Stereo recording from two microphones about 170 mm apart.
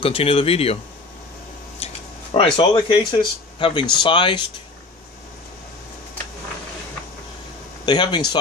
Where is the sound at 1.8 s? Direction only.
35° left (ahead or behind).